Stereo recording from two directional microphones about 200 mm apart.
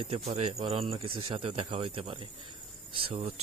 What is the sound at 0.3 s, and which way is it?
Speech, 30° right (ahead or behind).